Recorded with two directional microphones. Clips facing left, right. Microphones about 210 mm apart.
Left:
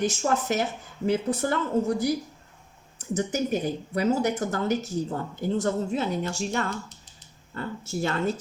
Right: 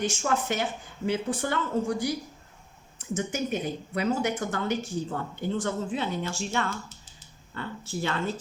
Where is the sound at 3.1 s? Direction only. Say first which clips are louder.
Left 3 dB; 40° left (ahead or behind).